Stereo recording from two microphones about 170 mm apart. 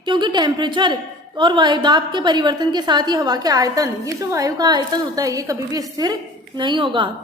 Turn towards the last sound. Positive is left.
turn(degrees=-30)  # may be behind; listen again after turning